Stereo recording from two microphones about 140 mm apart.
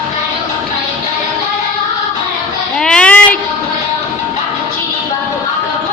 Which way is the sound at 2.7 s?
5° left (ahead or behind).